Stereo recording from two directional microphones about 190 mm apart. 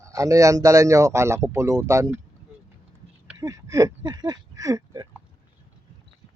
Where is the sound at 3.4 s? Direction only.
20° right (ahead or behind).